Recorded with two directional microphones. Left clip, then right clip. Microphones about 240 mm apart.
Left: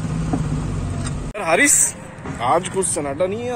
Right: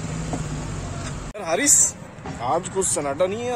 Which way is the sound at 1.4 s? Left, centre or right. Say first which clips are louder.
Left 4 dB; centre.